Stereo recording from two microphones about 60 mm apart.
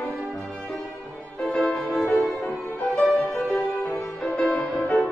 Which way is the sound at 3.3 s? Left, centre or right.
Left.